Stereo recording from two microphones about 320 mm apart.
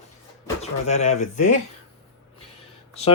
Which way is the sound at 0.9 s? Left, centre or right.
Left.